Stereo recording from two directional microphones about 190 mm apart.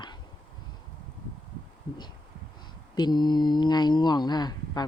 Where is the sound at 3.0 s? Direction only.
20° left (ahead or behind).